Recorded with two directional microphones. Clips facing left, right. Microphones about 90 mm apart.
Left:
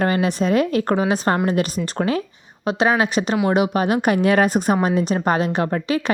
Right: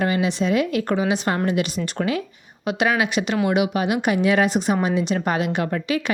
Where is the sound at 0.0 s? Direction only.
45° left (ahead or behind).